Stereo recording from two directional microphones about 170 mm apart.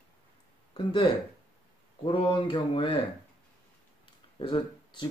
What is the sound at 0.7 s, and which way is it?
Speech, 30° left (ahead or behind).